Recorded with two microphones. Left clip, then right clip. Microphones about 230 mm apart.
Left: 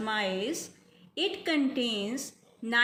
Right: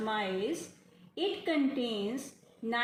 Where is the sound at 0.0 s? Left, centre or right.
Left.